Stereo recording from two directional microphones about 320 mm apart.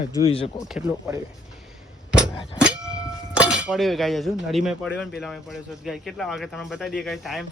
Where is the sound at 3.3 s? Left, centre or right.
Centre.